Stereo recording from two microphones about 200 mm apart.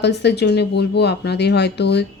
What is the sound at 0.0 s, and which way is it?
Speech, 55° left (ahead or behind).